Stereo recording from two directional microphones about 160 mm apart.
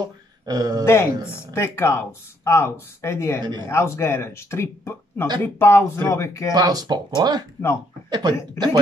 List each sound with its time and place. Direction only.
0.0 s a sound: 25° right (ahead or behind)
0.8 s speech: 15° left (ahead or behind)
3.3 s speech: 25° right (ahead or behind)
3.6 s speech: 15° left (ahead or behind)
6.5 s speech: 25° right (ahead or behind)